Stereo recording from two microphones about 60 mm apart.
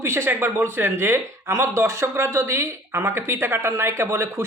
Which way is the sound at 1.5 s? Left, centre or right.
Right.